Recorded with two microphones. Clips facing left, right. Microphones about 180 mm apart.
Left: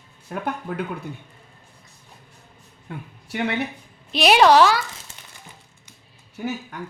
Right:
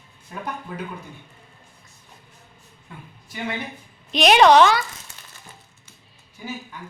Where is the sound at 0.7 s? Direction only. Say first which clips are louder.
Left 5 dB; 55° left (ahead or behind).